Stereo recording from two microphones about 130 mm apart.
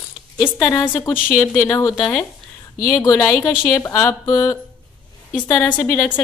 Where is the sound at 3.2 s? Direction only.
15° left (ahead or behind).